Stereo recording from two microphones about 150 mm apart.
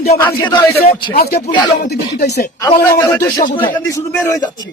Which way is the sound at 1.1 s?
90° left.